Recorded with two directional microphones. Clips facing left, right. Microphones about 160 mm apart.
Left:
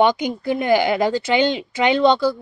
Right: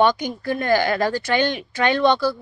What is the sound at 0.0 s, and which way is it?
Speech, 20° left (ahead or behind).